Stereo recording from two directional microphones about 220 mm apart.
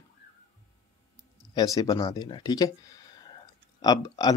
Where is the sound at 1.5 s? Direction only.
15° left (ahead or behind).